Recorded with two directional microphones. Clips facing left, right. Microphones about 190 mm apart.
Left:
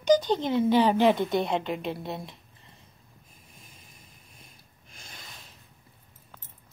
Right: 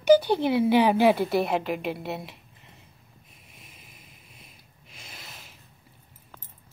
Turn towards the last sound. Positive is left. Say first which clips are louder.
# right 2 dB
turn(degrees=-5)  # may be behind; listen again after turning